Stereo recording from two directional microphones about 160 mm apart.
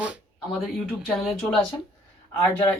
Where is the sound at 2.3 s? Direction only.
15° left (ahead or behind).